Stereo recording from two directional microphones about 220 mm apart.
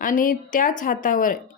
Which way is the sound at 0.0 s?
40° left (ahead or behind).